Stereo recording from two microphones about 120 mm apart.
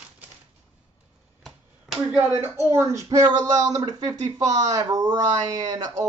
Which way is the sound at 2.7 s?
25° right (ahead or behind).